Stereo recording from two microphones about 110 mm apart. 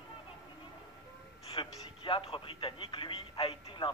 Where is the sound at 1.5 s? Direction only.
50° left (ahead or behind).